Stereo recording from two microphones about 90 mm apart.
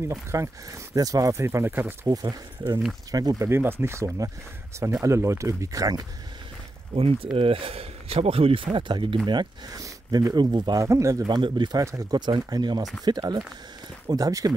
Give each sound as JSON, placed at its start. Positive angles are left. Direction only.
{"t": 0.1, "sound": "speech", "side_deg": -35}
{"t": 2.0, "sound": "speech", "side_deg": -50}
{"t": 3.4, "sound": "speech", "side_deg": -25}
{"t": 7.0, "sound": "speech", "side_deg": -90}
{"t": 8.6, "sound": "speech", "side_deg": -60}
{"t": 9.8, "sound": "speech", "side_deg": -45}
{"t": 10.8, "sound": "speech", "side_deg": -35}
{"t": 11.2, "sound": "speech", "side_deg": -60}
{"t": 11.8, "sound": "speech", "side_deg": -35}
{"t": 12.2, "sound": "speech", "side_deg": -50}